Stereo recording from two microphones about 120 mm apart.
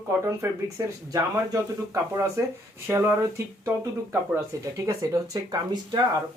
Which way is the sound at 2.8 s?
20° right (ahead or behind).